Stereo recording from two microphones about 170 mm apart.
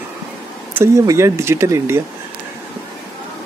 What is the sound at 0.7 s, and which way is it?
Speech, 15° right (ahead or behind).